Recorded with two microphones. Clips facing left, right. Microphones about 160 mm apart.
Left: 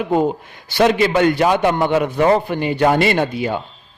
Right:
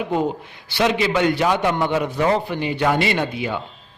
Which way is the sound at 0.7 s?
50° left (ahead or behind).